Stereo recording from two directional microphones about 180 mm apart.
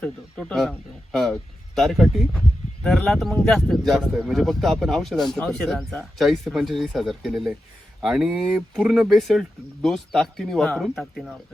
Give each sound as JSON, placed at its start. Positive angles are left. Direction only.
{"t": 0.0, "sound": "speech", "side_deg": 5}